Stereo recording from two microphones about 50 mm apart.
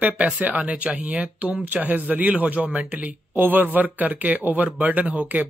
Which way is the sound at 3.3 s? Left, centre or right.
Right.